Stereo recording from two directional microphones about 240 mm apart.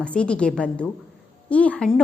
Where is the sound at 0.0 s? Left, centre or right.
Centre.